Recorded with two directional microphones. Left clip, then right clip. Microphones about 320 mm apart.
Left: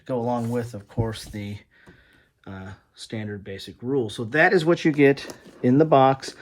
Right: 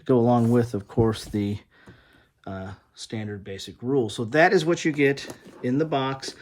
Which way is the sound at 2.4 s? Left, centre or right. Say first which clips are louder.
Right 4 dB; centre.